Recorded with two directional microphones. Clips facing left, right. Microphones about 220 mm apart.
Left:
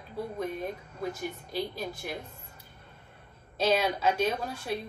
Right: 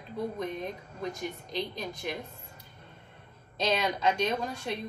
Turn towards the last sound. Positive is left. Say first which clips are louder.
# even
turn(degrees=5)  # may be behind; listen again after turning